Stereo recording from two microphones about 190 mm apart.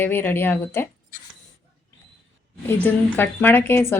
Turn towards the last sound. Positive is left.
turn(degrees=10)  # may be behind; listen again after turning